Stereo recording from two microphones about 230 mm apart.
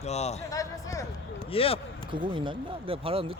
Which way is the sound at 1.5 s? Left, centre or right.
Left.